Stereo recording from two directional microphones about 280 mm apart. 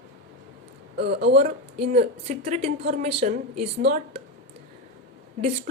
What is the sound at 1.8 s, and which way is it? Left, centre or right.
A woman's voice, right.